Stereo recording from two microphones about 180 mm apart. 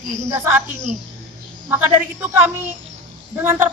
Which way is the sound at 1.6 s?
10° right (ahead or behind).